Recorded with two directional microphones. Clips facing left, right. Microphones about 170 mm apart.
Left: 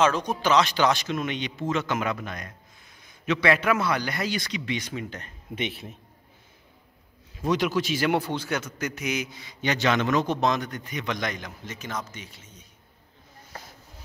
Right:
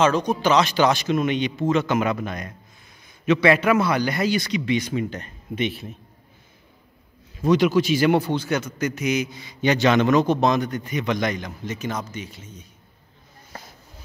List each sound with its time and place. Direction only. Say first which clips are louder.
0.0 s a man's voice: right 4 dB; 5° left (ahead or behind)
5.6 s a man's voice: right 6 dB; 20° left (ahead or behind)
7.4 s a man's voice: right 7 dB; 5° left (ahead or behind)
9.7 s a man's voice: right 6 dB; 15° right (ahead or behind)
10.2 s speech: right 5 dB; 10° right (ahead or behind)